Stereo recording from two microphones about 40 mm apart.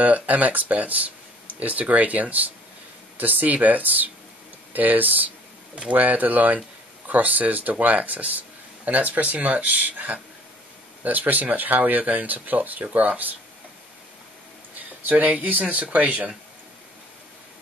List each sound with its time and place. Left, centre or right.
0.0 s speech: right
12.8 s speech: right
15.0 s speech: right